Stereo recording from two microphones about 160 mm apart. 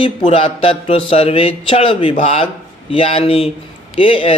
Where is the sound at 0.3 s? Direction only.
35° left (ahead or behind).